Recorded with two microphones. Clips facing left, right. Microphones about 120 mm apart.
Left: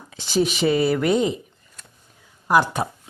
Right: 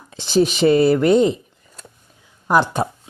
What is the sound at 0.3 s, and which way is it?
Speech, 25° right (ahead or behind).